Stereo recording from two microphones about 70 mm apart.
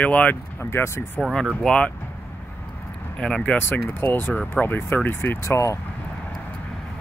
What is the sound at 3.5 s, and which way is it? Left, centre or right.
Speech, left.